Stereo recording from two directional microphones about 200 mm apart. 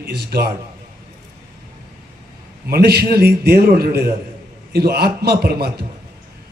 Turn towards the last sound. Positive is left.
turn(degrees=-55)  # may be behind; listen again after turning